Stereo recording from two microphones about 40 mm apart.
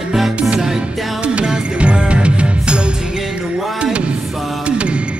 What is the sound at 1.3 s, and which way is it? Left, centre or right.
Music, right.